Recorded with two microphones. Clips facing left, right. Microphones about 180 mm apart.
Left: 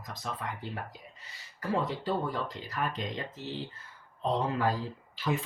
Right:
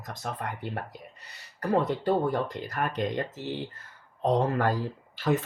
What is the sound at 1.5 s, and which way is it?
Speech, 70° right (ahead or behind).